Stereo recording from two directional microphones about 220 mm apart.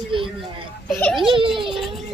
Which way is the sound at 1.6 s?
Centre (ahead or behind).